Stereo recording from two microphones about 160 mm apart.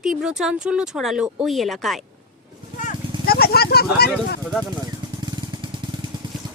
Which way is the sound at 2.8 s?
70° left (ahead or behind).